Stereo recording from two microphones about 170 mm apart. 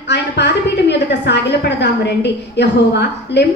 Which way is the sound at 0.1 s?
90° left.